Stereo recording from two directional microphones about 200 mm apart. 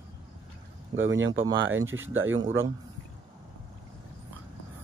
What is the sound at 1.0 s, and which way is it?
Speech, 70° right (ahead or behind).